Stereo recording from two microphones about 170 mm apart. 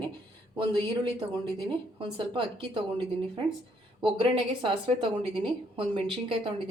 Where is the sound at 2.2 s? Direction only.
30° right (ahead or behind).